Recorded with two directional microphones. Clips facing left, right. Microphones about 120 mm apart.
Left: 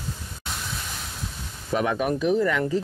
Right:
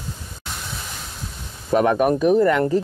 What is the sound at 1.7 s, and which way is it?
Speech, 45° right (ahead or behind).